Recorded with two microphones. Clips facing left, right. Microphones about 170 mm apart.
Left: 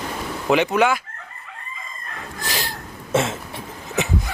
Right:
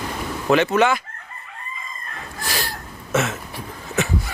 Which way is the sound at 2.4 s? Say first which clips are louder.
Right 1 dB; 15° left (ahead or behind).